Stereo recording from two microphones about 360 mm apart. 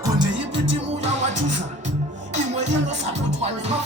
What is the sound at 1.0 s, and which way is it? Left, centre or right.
Music, centre.